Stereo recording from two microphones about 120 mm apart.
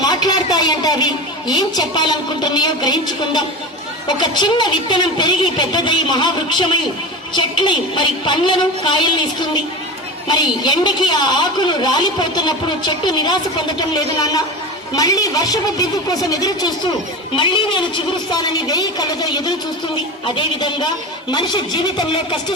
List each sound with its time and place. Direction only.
0.0 s a woman's voice: 35° left (ahead or behind)
10.2 s a woman's voice: 40° left (ahead or behind)